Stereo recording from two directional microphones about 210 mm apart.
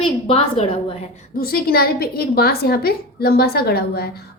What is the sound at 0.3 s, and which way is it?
Speech, 30° left (ahead or behind).